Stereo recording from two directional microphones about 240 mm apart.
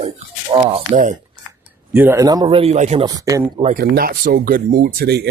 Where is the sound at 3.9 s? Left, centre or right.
Right.